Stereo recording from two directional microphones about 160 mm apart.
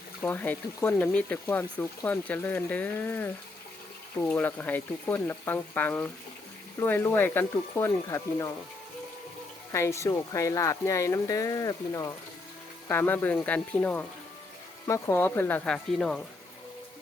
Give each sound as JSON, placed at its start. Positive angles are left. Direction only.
{"t": 0.2, "sound": "speech", "side_deg": 10}
{"t": 9.7, "sound": "speech", "side_deg": 20}